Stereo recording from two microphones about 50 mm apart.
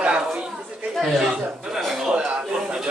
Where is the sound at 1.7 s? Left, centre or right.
Centre.